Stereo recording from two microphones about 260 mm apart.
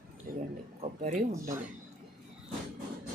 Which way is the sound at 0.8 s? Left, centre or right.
Right.